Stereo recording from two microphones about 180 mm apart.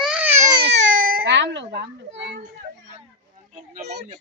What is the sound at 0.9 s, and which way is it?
Baby cry, 50° right (ahead or behind).